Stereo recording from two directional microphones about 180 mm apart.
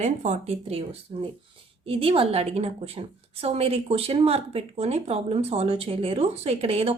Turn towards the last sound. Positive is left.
turn(degrees=-35)  # may be behind; listen again after turning